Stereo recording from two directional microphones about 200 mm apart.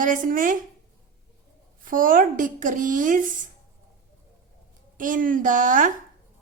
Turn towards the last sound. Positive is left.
turn(degrees=-40)  # may be behind; listen again after turning